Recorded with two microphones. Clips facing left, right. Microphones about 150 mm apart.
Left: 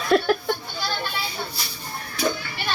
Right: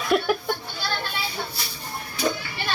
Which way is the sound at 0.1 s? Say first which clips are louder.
Left 3 dB; 10° right (ahead or behind).